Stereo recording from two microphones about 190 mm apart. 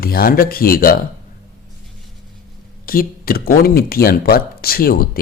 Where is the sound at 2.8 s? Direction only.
50° left (ahead or behind).